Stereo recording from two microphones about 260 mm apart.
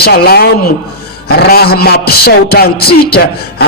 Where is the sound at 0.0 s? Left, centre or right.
Left.